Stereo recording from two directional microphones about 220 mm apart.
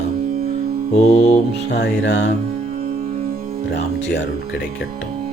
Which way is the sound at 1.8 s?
55° left (ahead or behind).